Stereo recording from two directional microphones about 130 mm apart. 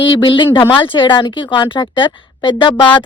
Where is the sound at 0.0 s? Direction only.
40° left (ahead or behind).